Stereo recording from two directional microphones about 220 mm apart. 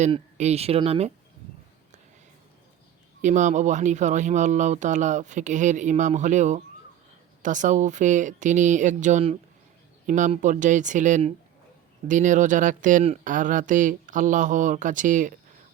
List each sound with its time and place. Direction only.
0.0 s speech: 30° right (ahead or behind)
3.2 s speech: 35° right (ahead or behind)